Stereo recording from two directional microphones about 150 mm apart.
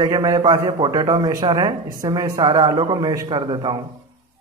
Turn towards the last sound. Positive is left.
turn(degrees=-30)  # may be behind; listen again after turning